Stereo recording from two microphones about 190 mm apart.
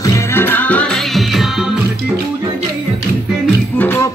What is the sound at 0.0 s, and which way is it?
Music, 10° left (ahead or behind).